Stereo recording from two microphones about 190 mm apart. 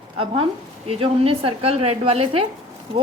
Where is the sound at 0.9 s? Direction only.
30° right (ahead or behind).